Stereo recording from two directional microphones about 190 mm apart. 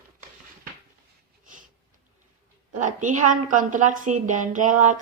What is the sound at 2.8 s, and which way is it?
A woman's voice, 40° right (ahead or behind).